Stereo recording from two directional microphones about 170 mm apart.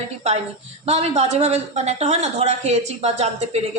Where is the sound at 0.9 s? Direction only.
40° right (ahead or behind).